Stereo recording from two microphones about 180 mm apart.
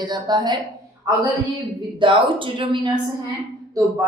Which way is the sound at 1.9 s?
30° right (ahead or behind).